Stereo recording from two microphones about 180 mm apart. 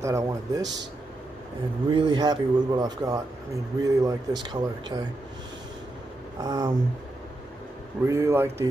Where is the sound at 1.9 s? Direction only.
25° right (ahead or behind).